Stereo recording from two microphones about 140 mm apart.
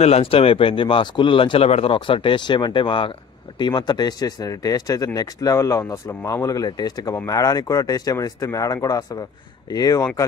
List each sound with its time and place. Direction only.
0.0 s speech: 45° left (ahead or behind); by 10.0 s 25° left (ahead or behind)